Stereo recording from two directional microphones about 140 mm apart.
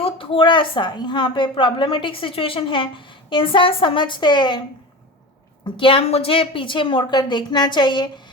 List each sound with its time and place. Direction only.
0.0 s a woman's voice: 40° left (ahead or behind)
5.7 s a woman's voice: 40° left (ahead or behind)